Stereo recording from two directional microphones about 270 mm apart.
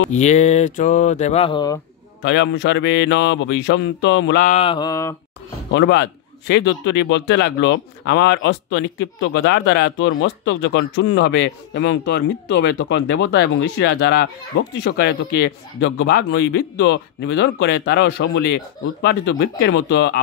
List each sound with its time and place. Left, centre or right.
0.1 s speech: left
2.2 s speech: left
4.5 s mantra: left
5.7 s speech: left